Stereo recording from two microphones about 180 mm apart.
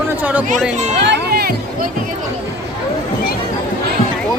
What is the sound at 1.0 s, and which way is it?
Speech, 60° right (ahead or behind).